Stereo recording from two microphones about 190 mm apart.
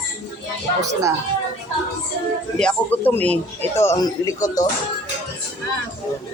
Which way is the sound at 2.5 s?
5° left (ahead or behind).